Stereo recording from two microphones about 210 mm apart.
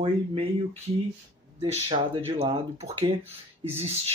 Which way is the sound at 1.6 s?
30° right (ahead or behind).